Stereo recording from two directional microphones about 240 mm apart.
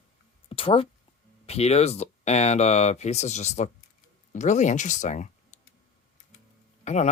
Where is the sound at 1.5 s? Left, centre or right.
Left.